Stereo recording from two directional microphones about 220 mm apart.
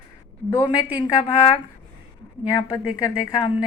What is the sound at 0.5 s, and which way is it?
A woman's voice, 20° left (ahead or behind).